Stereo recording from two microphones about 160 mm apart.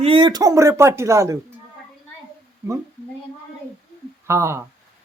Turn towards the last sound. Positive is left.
turn(degrees=-15)  # may be behind; listen again after turning